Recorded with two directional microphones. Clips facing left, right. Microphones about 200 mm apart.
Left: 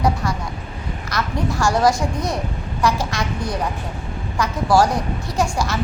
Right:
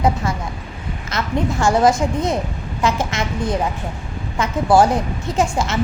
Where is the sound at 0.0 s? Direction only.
25° right (ahead or behind).